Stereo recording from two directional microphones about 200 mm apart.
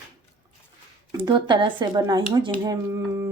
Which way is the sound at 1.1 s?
25° right (ahead or behind).